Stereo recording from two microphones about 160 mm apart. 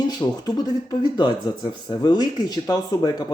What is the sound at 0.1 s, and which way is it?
Speech, 25° left (ahead or behind).